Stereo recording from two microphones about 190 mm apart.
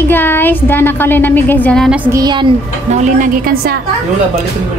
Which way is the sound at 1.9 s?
20° right (ahead or behind).